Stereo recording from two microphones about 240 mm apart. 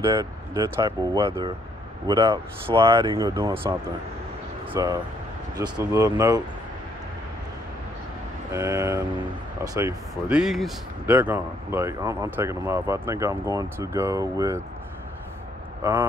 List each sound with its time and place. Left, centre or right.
0.0 s speech: centre
4.7 s speech: centre
8.5 s speech: centre
15.8 s speech: centre